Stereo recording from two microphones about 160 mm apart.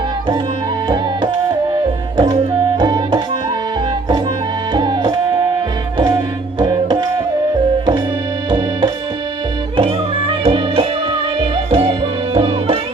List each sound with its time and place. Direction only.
0.9 s music: 30° right (ahead or behind)
4.7 s music: 30° right (ahead or behind)
8.4 s music: 30° right (ahead or behind)